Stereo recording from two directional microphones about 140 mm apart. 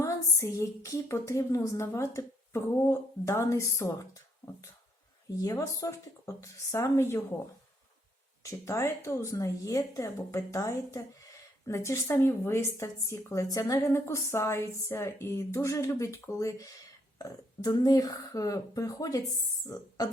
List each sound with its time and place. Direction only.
0.0 s a woman's voice: 20° left (ahead or behind)
5.4 s a woman's voice: 25° left (ahead or behind)
8.4 s a woman's voice: 20° left (ahead or behind)